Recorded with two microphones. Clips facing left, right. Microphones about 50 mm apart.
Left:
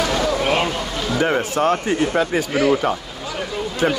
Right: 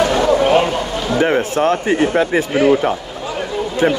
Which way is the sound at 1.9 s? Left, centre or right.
Right.